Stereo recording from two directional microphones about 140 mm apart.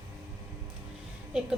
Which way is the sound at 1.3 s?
5° right (ahead or behind).